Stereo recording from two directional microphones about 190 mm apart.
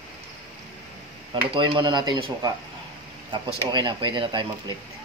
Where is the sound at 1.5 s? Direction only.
25° right (ahead or behind).